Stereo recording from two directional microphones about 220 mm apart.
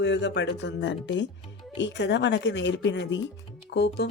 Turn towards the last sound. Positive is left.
turn(degrees=50)  # may be behind; listen again after turning